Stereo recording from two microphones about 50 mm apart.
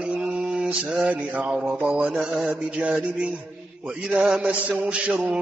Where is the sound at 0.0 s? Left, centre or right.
Right.